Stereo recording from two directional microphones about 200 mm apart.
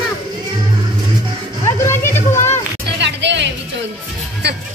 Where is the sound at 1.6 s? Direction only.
15° left (ahead or behind).